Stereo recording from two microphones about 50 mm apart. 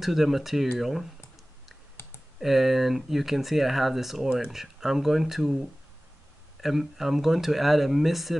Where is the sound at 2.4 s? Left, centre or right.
Centre.